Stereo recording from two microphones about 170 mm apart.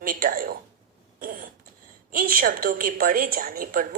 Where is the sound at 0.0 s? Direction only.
55° right (ahead or behind).